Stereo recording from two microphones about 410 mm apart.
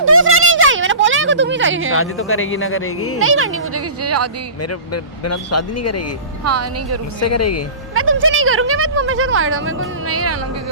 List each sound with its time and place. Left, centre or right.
0.0 s a sound: right
1.9 s speech: left
3.2 s speech: right
4.6 s speech: left
6.4 s speech: right
7.2 s speech: left
7.9 s speech: right